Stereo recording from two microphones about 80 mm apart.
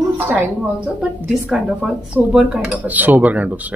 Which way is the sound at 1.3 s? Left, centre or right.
Centre.